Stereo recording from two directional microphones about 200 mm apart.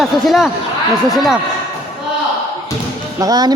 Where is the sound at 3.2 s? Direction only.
20° right (ahead or behind).